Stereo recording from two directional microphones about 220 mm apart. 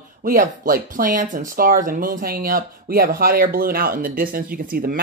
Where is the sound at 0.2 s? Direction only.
40° right (ahead or behind).